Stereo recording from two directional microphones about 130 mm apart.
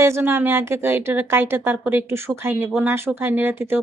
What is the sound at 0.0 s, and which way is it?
A woman's voice, 20° right (ahead or behind).